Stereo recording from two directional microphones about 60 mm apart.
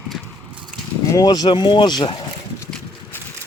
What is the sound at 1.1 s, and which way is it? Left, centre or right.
Speech, left.